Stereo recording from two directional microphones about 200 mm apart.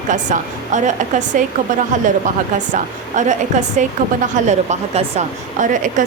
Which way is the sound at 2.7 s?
40° right (ahead or behind).